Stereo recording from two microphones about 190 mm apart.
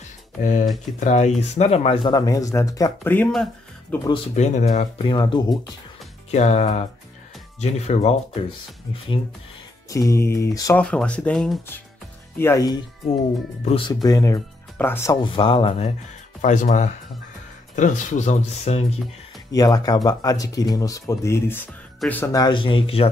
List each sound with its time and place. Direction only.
0.4 s speech: 40° left (ahead or behind); by 3.3 s 10° left (ahead or behind)
4.1 s speech: 35° left (ahead or behind)
6.3 s speech: 35° left (ahead or behind)
9.8 s mantra: 15° left (ahead or behind)
10.8 s speech: 5° left (ahead or behind)
12.4 s mantra: 15° left (ahead or behind)
13.7 s speech: 30° left (ahead or behind); by 15.1 s 10° left (ahead or behind)
15.2 s speech: 25° left (ahead or behind)
16.3 s speech: 40° left (ahead or behind)
19.5 s speech: 20° left (ahead or behind)